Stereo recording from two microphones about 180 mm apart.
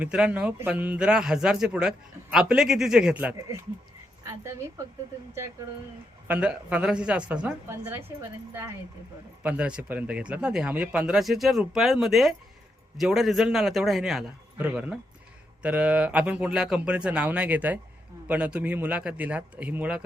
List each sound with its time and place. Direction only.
0.0 s a man's voice: 5° right (ahead or behind)
4.4 s a woman's voice: 15° right (ahead or behind)